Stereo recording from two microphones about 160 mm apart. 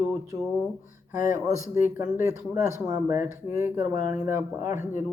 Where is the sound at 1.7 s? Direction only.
15° right (ahead or behind).